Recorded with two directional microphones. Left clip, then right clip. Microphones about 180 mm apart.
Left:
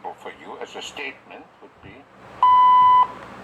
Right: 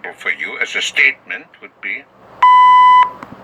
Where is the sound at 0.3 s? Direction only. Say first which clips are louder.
Right 16 dB; 40° right (ahead or behind).